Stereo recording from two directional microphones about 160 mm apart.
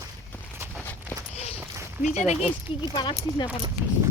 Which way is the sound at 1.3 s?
40° left (ahead or behind).